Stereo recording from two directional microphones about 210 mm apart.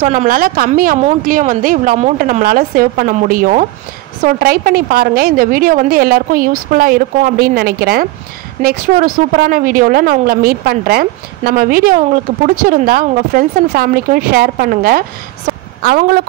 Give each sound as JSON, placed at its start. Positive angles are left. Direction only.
{"t": 0.0, "sound": "a woman's voice", "side_deg": -40}